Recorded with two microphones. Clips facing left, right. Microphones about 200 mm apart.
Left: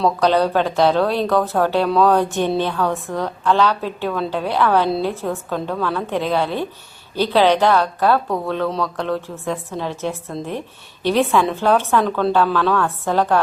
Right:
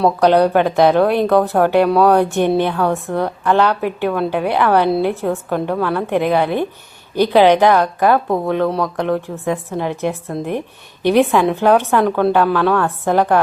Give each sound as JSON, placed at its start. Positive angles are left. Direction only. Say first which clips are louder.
{"t": 0.0, "sound": "speech", "louder": "right 4 dB", "side_deg": -15}
{"t": 11.0, "sound": "speech", "louder": "right 4 dB", "side_deg": -15}